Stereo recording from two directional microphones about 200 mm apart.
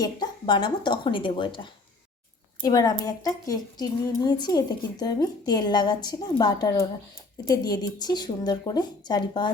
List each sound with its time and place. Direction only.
0.0 s a woman's voice: 20° left (ahead or behind)